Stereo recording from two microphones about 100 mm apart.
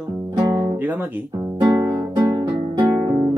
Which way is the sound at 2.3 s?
50° right (ahead or behind).